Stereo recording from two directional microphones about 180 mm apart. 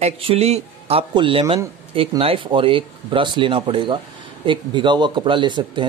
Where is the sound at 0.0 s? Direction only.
35° right (ahead or behind).